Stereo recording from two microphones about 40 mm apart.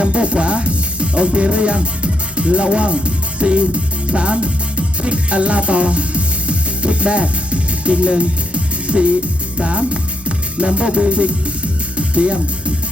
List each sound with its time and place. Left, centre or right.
0.0 s music: right